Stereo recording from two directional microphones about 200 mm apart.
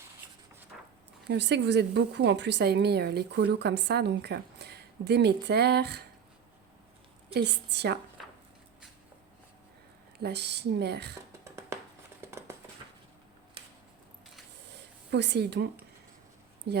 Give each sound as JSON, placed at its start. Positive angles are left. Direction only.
{"t": 1.3, "sound": "a woman's voice", "side_deg": -60}
{"t": 7.3, "sound": "a woman's voice", "side_deg": -55}
{"t": 10.2, "sound": "a woman's voice", "side_deg": -55}
{"t": 11.4, "sound": "a sound", "side_deg": -15}
{"t": 14.7, "sound": "a sound", "side_deg": -60}
{"t": 16.7, "sound": "a woman's voice", "side_deg": -55}